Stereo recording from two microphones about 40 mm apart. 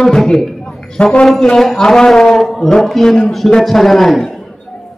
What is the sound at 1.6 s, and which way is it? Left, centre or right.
A man's voice, centre.